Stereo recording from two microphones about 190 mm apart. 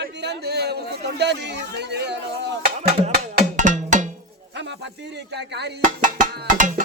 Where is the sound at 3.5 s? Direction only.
40° right (ahead or behind).